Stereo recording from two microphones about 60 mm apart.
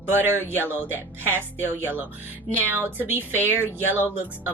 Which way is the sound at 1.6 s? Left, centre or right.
Right.